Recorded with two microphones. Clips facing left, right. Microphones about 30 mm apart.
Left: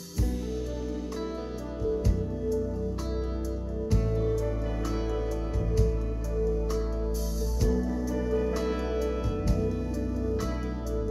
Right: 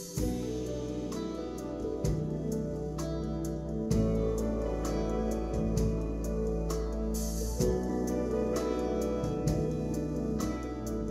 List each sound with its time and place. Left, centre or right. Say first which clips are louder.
1.9 s music: left 6 dB; left
3.9 s music: left 1 dB; left
7.6 s music: left 1 dB; left